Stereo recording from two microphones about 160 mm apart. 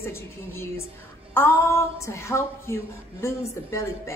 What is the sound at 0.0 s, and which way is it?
A woman's voice, 15° left (ahead or behind).